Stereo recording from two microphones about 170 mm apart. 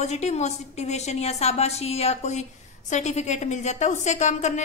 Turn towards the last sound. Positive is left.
turn(degrees=45)  # may be behind; listen again after turning